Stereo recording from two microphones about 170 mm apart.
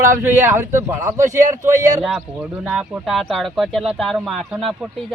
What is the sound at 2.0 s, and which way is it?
Speech, 5° right (ahead or behind).